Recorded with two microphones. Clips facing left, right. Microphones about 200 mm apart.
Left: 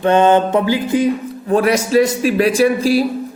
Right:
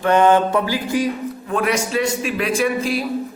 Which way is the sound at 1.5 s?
35° left (ahead or behind).